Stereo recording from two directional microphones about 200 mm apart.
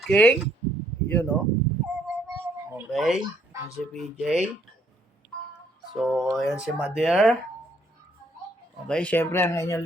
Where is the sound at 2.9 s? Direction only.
Centre (ahead or behind).